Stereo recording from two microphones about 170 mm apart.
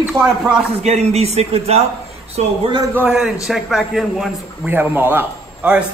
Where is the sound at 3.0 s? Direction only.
5° right (ahead or behind).